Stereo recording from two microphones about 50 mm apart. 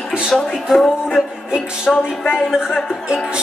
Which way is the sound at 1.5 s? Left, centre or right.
Centre.